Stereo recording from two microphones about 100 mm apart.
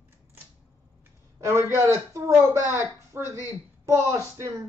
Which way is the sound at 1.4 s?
30° right (ahead or behind).